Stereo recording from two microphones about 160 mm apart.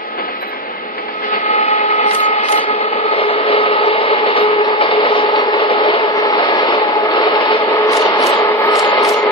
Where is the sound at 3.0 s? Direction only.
35° left (ahead or behind).